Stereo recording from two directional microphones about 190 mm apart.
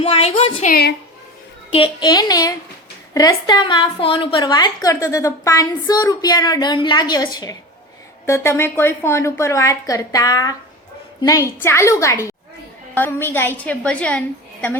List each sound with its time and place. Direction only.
0.0 s speech: 30° left (ahead or behind)
0.7 s a woman's voice: 55° left (ahead or behind)
1.7 s a woman's voice: 25° left (ahead or behind)
8.3 s speech: 15° left (ahead or behind)